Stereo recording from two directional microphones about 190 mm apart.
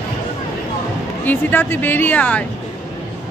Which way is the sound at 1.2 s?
10° left (ahead or behind).